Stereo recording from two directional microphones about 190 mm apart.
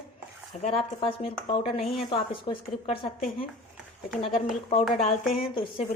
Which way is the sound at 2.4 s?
30° left (ahead or behind).